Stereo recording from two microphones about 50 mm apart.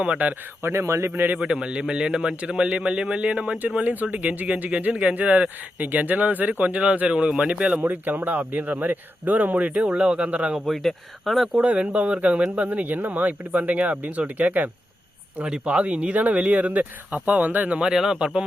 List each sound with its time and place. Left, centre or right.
0.6 s speech: right
1.1 s speech: right
1.4 s a man's voice: centre
7.8 s speech: right
10.7 s speech: centre
11.5 s a man's voice: right
15.4 s a man's voice: centre; by 17.7 s right
17.7 s speech: centre